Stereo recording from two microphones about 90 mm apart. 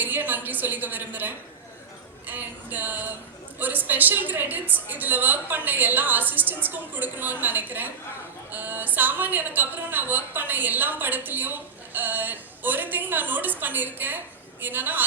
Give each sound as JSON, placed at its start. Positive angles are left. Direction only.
{"t": 0.0, "sound": "a woman's voice", "side_deg": -20}